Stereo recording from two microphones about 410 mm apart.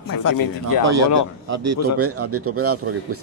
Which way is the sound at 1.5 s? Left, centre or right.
Right.